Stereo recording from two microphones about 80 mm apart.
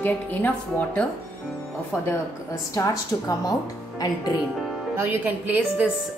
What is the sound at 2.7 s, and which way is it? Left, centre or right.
Speech, left.